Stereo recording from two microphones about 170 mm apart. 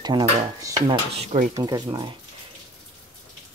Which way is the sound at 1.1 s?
45° right (ahead or behind).